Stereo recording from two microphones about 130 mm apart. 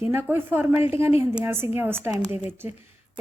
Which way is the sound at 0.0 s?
15° right (ahead or behind).